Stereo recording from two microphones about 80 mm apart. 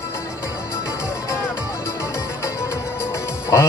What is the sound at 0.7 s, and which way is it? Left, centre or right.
Music, left.